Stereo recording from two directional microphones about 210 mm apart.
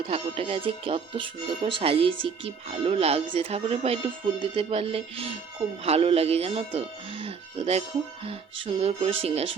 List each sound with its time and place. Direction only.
0.0 s speech: 25° right (ahead or behind)